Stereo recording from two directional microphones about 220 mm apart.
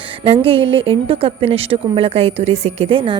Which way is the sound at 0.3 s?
25° right (ahead or behind).